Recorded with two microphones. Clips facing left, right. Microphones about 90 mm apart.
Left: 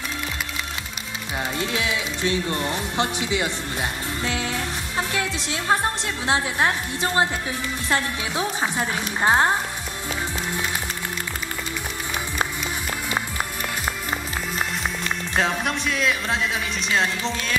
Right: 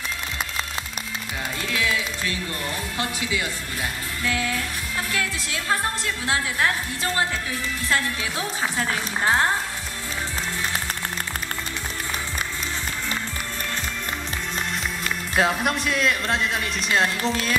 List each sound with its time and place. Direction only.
1.6 s music: 25° left (ahead or behind)
15.3 s music: 5° right (ahead or behind)